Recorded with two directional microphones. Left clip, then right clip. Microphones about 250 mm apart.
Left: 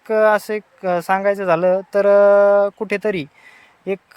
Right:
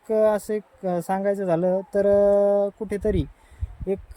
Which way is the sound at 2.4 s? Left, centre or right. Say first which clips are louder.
Left 7 dB; left.